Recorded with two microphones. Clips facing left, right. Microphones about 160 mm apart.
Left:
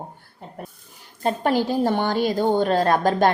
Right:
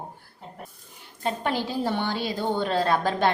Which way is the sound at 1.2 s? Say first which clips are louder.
Left 6 dB; 45° left (ahead or behind).